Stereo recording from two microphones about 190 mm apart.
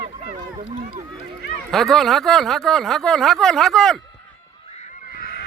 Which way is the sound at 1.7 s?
Centre (ahead or behind).